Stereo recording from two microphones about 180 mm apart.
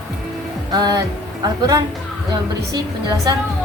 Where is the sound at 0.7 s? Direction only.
20° right (ahead or behind).